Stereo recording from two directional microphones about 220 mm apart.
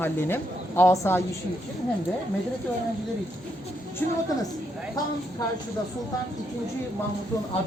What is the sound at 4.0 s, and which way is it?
Speech, 10° left (ahead or behind).